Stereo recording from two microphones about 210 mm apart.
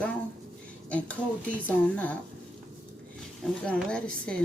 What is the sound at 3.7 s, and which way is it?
Speech, 5° left (ahead or behind).